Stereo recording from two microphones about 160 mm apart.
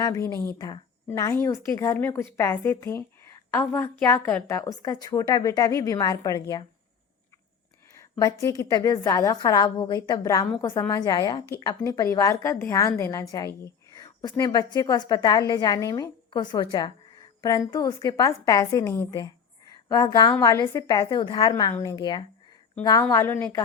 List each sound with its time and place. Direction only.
0.3 s a woman's voice: 15° left (ahead or behind)
8.2 s a woman's voice: 20° left (ahead or behind)
17.7 s a woman's voice: 25° left (ahead or behind)